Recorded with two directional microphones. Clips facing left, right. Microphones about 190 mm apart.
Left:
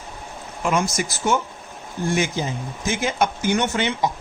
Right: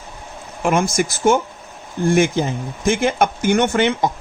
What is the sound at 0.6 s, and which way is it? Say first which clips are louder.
Speech: right 4 dB; 50° right (ahead or behind).